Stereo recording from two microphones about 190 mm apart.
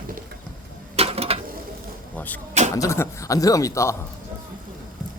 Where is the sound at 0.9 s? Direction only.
30° right (ahead or behind).